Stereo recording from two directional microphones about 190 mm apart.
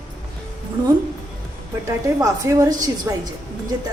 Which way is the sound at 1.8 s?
15° right (ahead or behind).